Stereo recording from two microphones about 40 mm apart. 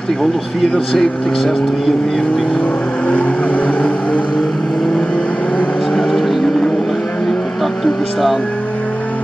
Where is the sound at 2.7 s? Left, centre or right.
Left.